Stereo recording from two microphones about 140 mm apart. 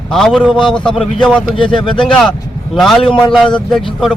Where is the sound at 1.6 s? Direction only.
35° left (ahead or behind).